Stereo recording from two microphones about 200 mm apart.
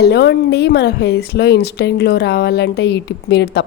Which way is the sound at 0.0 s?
55° left (ahead or behind).